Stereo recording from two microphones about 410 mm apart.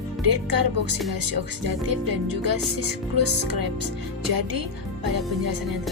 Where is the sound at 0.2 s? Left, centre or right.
Right.